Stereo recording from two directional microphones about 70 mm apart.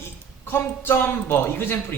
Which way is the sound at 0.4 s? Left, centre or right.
Left.